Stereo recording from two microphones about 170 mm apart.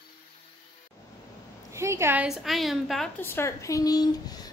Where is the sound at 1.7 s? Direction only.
15° right (ahead or behind).